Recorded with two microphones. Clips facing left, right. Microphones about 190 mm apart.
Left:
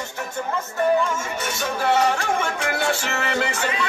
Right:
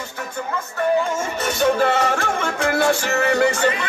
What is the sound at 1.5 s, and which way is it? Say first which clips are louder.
Music: right 6 dB; 55° right (ahead or behind).